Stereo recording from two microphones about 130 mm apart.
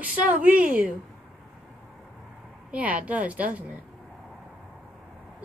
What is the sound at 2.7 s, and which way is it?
Speech, 10° right (ahead or behind).